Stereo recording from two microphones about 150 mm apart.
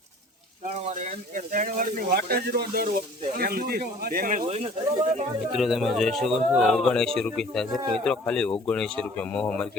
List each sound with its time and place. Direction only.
0.6 s speech: 55° right (ahead or behind)
5.5 s speech: centre (ahead or behind)